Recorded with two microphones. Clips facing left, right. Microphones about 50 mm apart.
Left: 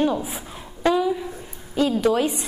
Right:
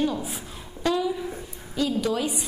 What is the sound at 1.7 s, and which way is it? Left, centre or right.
Speech, left.